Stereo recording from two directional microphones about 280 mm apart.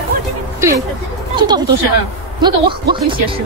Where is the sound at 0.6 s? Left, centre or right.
Centre.